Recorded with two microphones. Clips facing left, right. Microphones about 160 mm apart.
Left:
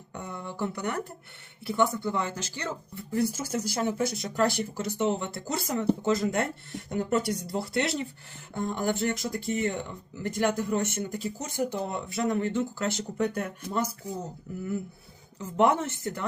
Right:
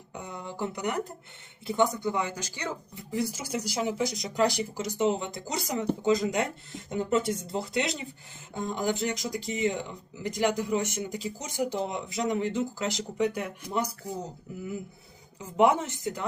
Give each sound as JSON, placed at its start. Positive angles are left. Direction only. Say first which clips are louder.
{"t": 0.1, "sound": "speech", "louder": "left 1 dB", "side_deg": -15}
{"t": 15.4, "sound": "speech", "louder": "right 1 dB", "side_deg": -10}